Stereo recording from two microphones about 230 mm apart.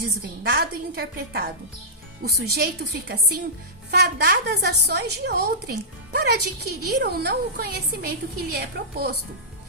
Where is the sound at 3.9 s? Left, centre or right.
Right.